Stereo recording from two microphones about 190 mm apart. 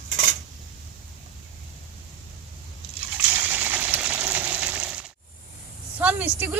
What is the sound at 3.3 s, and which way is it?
Water, 10° right (ahead or behind).